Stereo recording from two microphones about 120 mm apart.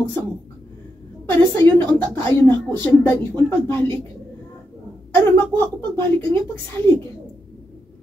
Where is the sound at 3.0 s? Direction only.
20° left (ahead or behind).